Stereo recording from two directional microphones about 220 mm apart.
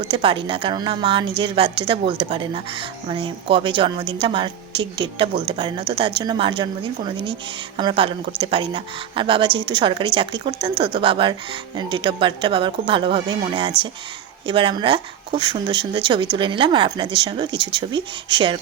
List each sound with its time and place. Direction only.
0.0 s speech: 20° right (ahead or behind)